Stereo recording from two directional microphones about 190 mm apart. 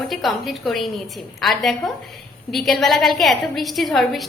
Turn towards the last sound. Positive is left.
turn(degrees=0)  # may be behind; listen again after turning